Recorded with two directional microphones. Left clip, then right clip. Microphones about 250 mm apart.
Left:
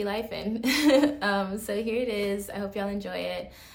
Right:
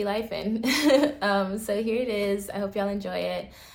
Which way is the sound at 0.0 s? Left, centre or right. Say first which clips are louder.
Right 2 dB; centre.